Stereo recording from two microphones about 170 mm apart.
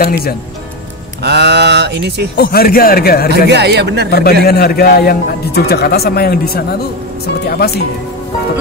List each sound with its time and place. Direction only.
0.0 s a man's voice: 60° left (ahead or behind)
1.2 s speech: 85° right
2.3 s a man's voice: 65° left (ahead or behind)
3.3 s speech: 80° right
4.1 s a man's voice: 65° left (ahead or behind)